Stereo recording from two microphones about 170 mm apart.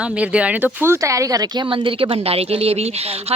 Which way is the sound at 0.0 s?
5° right (ahead or behind).